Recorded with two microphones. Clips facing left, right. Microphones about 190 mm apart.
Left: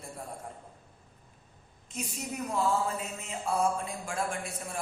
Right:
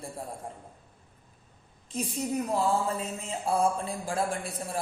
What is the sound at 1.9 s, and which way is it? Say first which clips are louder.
Speech: right 6 dB; 35° right (ahead or behind).